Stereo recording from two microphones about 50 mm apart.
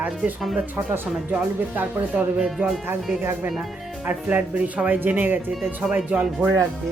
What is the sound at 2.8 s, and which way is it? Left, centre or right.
Speech, right.